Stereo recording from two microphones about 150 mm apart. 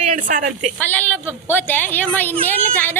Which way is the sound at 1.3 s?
15° left (ahead or behind).